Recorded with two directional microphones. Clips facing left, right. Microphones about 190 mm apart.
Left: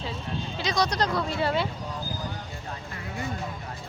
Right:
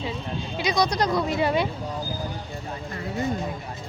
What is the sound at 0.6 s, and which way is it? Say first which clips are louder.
Speech: right 3 dB; 10° right (ahead or behind).